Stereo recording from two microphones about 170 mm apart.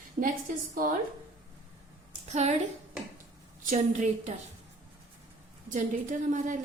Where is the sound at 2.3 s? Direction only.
40° right (ahead or behind).